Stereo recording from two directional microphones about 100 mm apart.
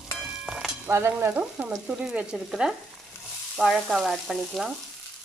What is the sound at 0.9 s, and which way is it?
Stir, 25° right (ahead or behind).